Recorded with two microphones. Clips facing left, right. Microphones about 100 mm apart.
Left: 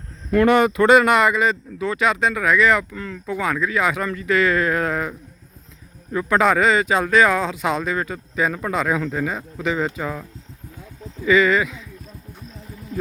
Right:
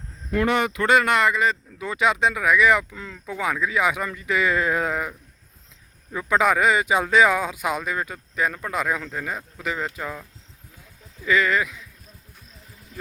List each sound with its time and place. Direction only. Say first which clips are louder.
0.3 s speech: left 6 dB; 55° left (ahead or behind); by 0.9 s 40° left (ahead or behind)
0.9 s speech: left 3 dB; 15° left (ahead or behind)
1.8 s speech: left 1 dB; 15° right (ahead or behind)
9.0 s speech: left 7 dB; 5° left (ahead or behind)
11.3 s speech: left 5 dB; centre (ahead or behind)